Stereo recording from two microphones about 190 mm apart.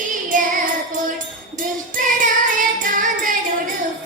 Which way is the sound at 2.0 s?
45° right (ahead or behind).